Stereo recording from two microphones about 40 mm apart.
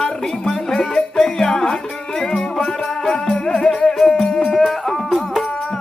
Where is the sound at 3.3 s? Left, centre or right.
Left; by 5.4 s centre.